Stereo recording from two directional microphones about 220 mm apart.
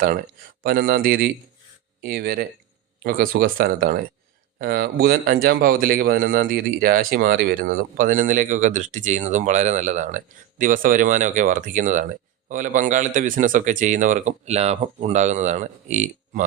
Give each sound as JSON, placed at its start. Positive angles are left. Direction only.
{"t": 0.6, "sound": "speech", "side_deg": -45}